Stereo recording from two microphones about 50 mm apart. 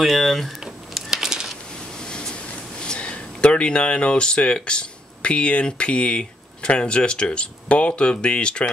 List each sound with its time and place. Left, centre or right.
0.0 s speech: centre
0.9 s a sound: centre
2.0 s speech: centre